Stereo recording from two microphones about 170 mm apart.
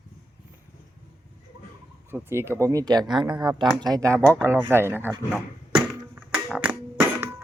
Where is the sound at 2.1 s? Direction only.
15° right (ahead or behind).